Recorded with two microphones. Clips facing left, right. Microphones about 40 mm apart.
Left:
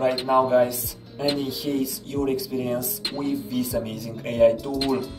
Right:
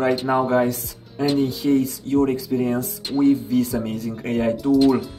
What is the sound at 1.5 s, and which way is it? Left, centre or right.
Speech, right.